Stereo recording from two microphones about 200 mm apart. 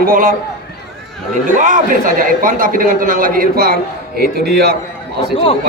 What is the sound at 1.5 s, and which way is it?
A man's voice, 40° right (ahead or behind).